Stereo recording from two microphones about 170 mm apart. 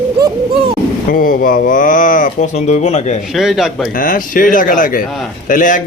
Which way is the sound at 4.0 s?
50° left (ahead or behind).